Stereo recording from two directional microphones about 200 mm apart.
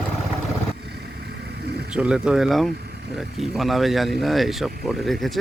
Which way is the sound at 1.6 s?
55° right (ahead or behind).